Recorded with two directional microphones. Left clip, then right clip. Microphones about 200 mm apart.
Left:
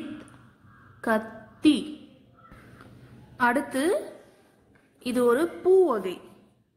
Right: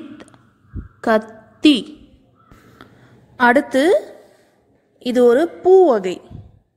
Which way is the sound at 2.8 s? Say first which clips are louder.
Right 7 dB; 35° right (ahead or behind).